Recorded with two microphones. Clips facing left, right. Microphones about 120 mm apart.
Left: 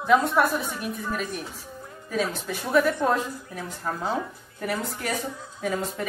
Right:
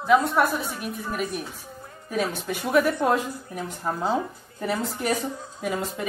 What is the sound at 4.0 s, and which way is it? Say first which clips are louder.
Speech: right 4 dB; 25° right (ahead or behind).